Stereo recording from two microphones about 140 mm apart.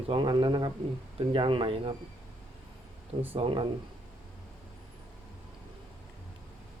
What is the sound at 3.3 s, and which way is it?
Speech, 40° right (ahead or behind).